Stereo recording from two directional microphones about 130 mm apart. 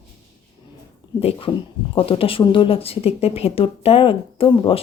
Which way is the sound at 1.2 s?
50° left (ahead or behind).